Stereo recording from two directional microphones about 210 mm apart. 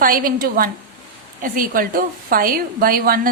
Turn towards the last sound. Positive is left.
turn(degrees=-45)  # may be behind; listen again after turning